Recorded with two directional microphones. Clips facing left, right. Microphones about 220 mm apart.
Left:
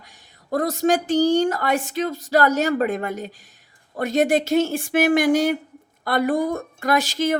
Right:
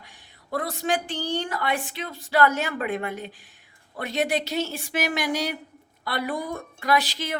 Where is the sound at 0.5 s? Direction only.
45° left (ahead or behind).